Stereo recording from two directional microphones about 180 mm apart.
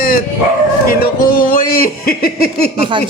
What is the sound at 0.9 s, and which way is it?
Speech, 55° left (ahead or behind).